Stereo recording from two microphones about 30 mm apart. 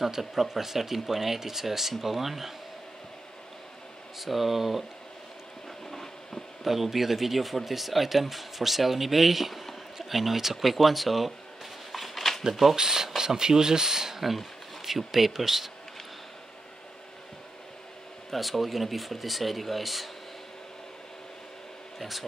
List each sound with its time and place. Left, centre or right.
0.0 s speech: centre
4.2 s speech: centre
5.9 s a sound: centre
6.6 s speech: centre
11.9 s a sound: centre
12.7 s speech: centre
14.9 s speech: centre
18.3 s speech: centre
21.9 s speech: centre